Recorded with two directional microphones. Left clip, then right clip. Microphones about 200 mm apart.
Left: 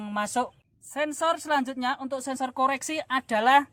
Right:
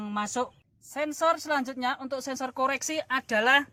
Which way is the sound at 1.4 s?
20° left (ahead or behind).